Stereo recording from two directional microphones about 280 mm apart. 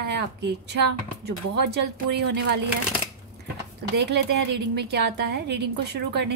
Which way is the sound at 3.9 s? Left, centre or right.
Right.